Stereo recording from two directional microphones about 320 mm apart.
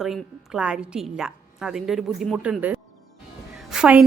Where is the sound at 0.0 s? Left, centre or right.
Centre.